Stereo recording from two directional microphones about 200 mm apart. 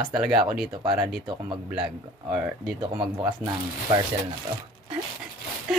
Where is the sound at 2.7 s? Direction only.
25° right (ahead or behind).